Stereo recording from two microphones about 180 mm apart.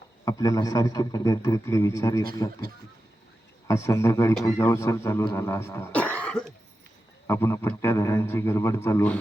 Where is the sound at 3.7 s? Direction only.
15° left (ahead or behind).